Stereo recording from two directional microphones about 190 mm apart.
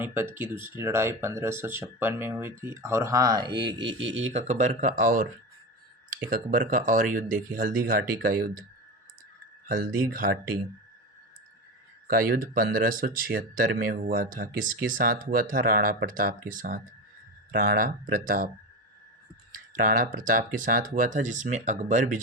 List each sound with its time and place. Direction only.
0.0 s speech: 10° right (ahead or behind); by 5.3 s 50° right (ahead or behind)
6.3 s speech: 45° right (ahead or behind)
9.6 s speech: 45° right (ahead or behind)
12.0 s speech: 50° right (ahead or behind)
19.7 s speech: 45° right (ahead or behind)